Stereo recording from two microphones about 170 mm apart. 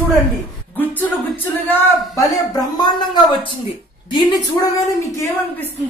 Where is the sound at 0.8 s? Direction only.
10° left (ahead or behind).